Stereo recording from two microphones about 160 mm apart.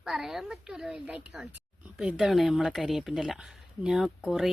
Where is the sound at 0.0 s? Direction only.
Centre (ahead or behind).